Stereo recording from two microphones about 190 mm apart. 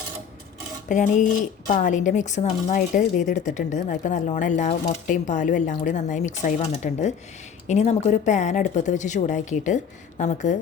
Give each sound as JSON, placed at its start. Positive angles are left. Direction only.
{"t": 0.9, "sound": "speech", "side_deg": 40}